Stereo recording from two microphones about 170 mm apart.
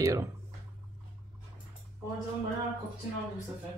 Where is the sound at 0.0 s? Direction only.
20° right (ahead or behind).